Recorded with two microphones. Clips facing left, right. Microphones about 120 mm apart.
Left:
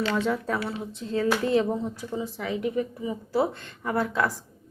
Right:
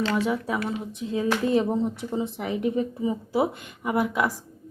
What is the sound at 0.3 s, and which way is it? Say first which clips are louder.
Speech: right 1 dB; 10° right (ahead or behind).